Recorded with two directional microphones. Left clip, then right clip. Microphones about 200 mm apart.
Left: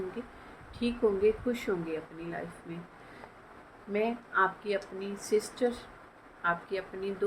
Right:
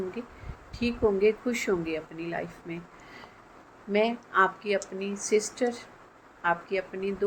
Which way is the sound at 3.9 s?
30° right (ahead or behind).